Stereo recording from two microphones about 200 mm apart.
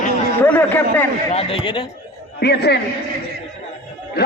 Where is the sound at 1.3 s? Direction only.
30° left (ahead or behind).